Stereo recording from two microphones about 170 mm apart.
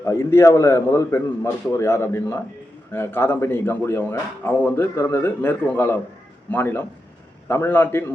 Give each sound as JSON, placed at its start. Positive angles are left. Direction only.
{"t": 0.0, "sound": "a man's voice", "side_deg": 15}